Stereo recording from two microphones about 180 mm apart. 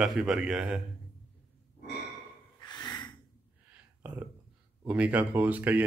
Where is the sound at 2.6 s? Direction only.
25° left (ahead or behind).